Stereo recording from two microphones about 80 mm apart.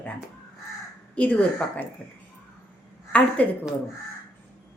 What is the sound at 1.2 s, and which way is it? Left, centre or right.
Speech, centre.